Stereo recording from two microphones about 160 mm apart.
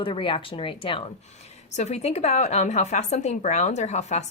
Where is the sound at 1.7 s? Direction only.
45° left (ahead or behind).